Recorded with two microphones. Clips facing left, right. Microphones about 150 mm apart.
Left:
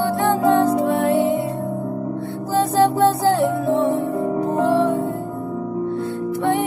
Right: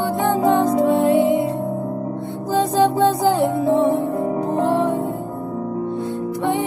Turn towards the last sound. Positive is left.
turn(degrees=-20)  # may be behind; listen again after turning